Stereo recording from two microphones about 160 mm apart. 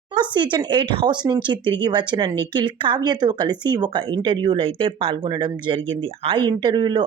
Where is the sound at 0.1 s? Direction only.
30° right (ahead or behind).